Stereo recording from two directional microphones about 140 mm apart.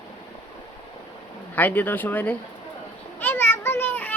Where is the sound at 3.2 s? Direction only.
15° left (ahead or behind).